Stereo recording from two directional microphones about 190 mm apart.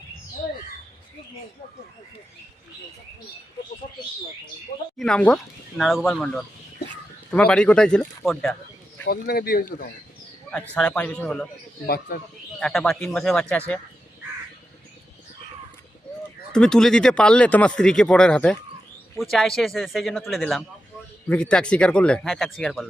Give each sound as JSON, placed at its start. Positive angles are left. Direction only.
{"t": 4.9, "sound": "speech", "side_deg": 5}
{"t": 9.0, "sound": "a man's voice", "side_deg": 55}
{"t": 10.5, "sound": "speech", "side_deg": 5}
{"t": 11.9, "sound": "a man's voice", "side_deg": 50}
{"t": 12.5, "sound": "speech", "side_deg": 5}
{"t": 16.5, "sound": "speech", "side_deg": 5}